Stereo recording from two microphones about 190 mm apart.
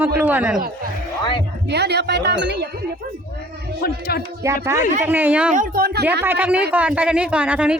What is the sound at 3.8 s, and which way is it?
Speech, 55° left (ahead or behind).